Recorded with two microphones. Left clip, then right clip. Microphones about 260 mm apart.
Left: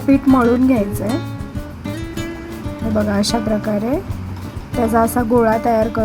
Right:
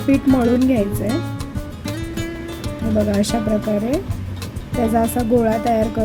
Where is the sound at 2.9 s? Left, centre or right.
Centre.